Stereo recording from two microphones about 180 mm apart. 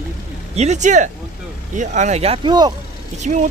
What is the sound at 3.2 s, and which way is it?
Speech, 40° right (ahead or behind).